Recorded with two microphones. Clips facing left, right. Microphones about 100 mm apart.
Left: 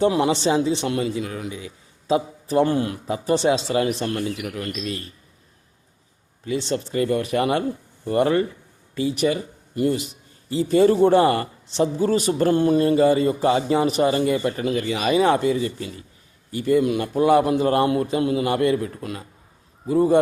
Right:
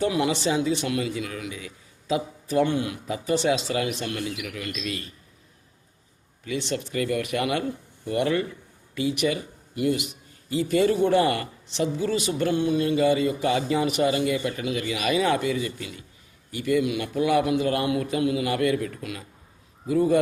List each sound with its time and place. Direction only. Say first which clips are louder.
0.0 s speech: left 5 dB; 30° left (ahead or behind)
6.4 s speech: left 4 dB; 35° left (ahead or behind)